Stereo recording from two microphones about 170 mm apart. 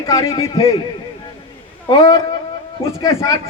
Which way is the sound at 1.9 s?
20° left (ahead or behind).